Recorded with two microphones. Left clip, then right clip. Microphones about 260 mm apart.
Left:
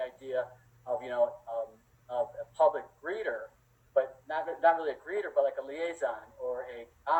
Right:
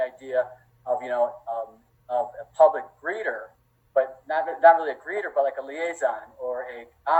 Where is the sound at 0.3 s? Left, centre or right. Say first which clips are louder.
Right 8 dB; right.